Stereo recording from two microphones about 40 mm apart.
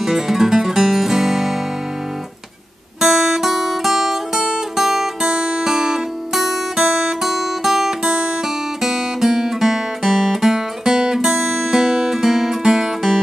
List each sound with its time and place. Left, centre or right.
0.0 s music: centre
3.0 s guitar: centre
3.4 s music: centre
4.4 s music: centre
7.2 s music: centre